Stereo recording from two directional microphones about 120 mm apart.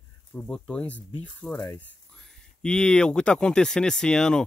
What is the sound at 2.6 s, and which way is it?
Speech, 5° left (ahead or behind).